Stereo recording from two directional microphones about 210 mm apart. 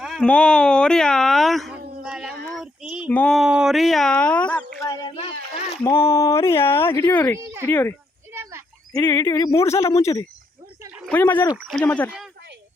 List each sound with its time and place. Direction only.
0.0 s speech: centre (ahead or behind)
2.6 s child singing: 5° right (ahead or behind)
3.1 s speech: 5° left (ahead or behind)
4.9 s a sound: 20° left (ahead or behind)
5.8 s speech: 15° left (ahead or behind)
7.3 s speech: 10° right (ahead or behind)
7.7 s speech: 10° left (ahead or behind)
8.3 s a sound: 10° right (ahead or behind)
8.9 s speech: 10° left (ahead or behind)
11.5 s speech: centre (ahead or behind)